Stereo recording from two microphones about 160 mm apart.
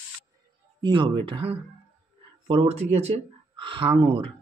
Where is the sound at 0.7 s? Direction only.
30° right (ahead or behind).